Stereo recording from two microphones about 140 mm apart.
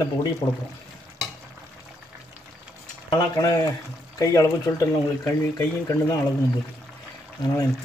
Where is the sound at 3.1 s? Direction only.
25° left (ahead or behind).